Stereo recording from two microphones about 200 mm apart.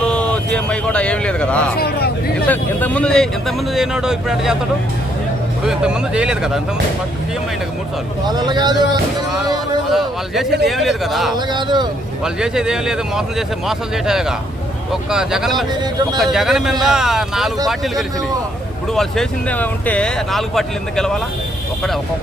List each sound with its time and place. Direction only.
0.0 s speech: 5° left (ahead or behind)
1.7 s speech: 50° left (ahead or behind)
2.5 s speech: 5° left (ahead or behind)
5.6 s speech: 5° right (ahead or behind)
8.3 s speech: 20° right (ahead or behind)
9.9 s speech: centre (ahead or behind)
11.3 s speech: 20° right (ahead or behind)
12.2 s speech: 5° right (ahead or behind)